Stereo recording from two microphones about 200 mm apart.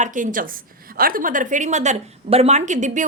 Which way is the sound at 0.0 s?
40° right (ahead or behind).